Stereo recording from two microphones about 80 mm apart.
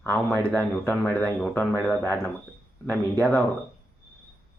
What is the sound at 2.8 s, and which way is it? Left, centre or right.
Speech, left.